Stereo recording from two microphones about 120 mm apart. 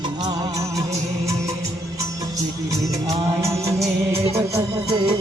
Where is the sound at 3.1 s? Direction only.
25° right (ahead or behind).